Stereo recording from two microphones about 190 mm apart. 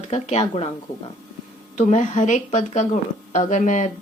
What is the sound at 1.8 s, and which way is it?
Speech, 40° left (ahead or behind).